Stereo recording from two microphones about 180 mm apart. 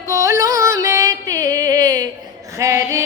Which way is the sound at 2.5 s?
15° right (ahead or behind).